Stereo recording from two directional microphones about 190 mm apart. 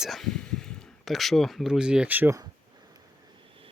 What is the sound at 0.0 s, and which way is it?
Speech, centre (ahead or behind).